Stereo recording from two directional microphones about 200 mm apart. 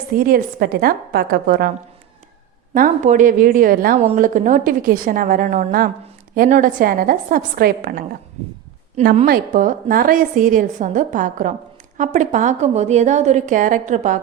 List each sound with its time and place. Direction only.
0.2 s a woman's voice: 45° right (ahead or behind)
2.7 s a woman's voice: 40° right (ahead or behind)
4.0 s a woman's voice: 35° right (ahead or behind)
9.2 s a woman's voice: 45° right (ahead or behind)